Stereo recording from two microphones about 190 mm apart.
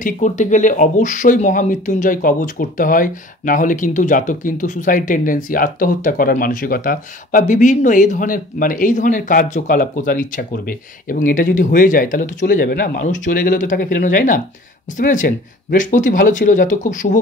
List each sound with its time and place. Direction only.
0.0 s speech: 40° left (ahead or behind)